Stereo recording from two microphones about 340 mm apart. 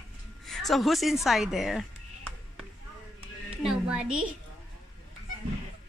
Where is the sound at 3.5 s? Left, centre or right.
Centre.